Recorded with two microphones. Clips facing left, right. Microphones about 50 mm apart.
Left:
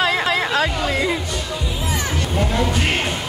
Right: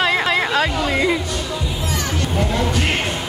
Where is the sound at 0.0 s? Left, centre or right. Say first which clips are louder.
Right 1 dB; centre.